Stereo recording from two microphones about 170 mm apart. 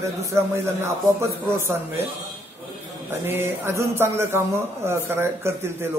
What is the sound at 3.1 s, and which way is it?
Speech, 15° right (ahead or behind).